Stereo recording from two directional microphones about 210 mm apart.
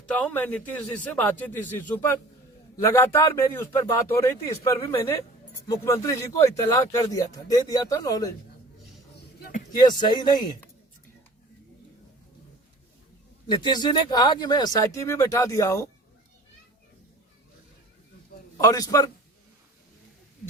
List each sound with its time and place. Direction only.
0.0 s speech: 5° left (ahead or behind)
9.7 s speech: 20° left (ahead or behind)
13.5 s speech: 20° left (ahead or behind)
18.6 s speech: 15° left (ahead or behind)